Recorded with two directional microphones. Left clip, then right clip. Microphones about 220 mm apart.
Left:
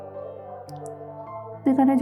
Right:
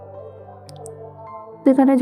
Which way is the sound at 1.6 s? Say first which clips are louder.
Right 6 dB; 25° right (ahead or behind).